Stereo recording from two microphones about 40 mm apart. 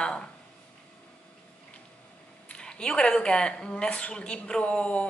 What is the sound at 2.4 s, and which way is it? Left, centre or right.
Speech, left.